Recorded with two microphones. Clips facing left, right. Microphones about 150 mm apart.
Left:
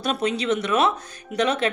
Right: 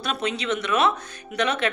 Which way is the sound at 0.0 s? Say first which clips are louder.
Left 3 dB; 45° left (ahead or behind).